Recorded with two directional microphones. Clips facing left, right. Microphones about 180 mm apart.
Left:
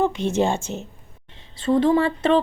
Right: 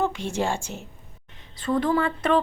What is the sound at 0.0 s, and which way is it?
A woman's voice, 20° left (ahead or behind).